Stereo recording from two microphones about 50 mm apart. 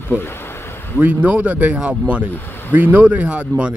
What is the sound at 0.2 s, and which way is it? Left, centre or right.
Speech, left.